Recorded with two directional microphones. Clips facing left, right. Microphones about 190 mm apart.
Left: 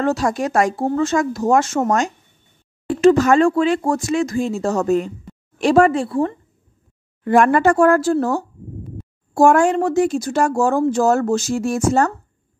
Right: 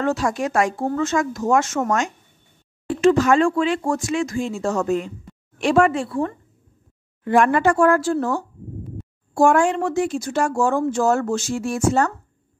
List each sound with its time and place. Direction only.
0.0 s speech: 40° left (ahead or behind)
7.2 s speech: 45° left (ahead or behind)